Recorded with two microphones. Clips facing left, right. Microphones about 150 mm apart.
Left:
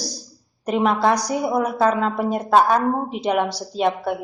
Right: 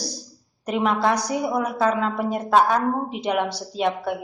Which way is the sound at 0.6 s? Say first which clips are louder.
Left 3 dB; 40° left (ahead or behind).